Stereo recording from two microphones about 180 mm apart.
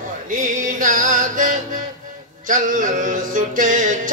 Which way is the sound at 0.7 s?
45° right (ahead or behind).